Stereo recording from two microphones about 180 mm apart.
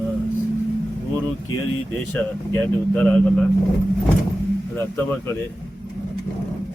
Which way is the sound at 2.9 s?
5° left (ahead or behind).